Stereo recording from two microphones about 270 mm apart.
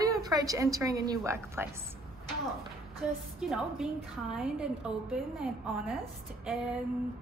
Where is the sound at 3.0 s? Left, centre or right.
Centre.